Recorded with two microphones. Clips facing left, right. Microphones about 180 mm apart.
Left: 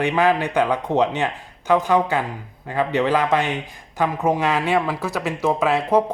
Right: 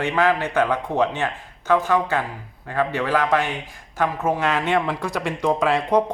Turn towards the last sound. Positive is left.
turn(degrees=5)  # may be behind; listen again after turning